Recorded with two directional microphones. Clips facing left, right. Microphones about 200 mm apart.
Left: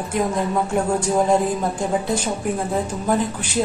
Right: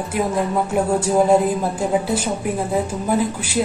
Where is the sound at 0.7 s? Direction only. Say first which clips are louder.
Right 3 dB; 5° right (ahead or behind).